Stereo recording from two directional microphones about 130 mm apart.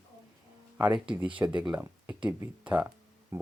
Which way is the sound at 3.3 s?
20° right (ahead or behind).